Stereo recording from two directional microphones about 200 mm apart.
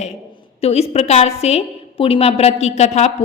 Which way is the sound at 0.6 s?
30° left (ahead or behind).